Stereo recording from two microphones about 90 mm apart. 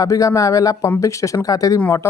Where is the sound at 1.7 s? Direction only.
30° left (ahead or behind).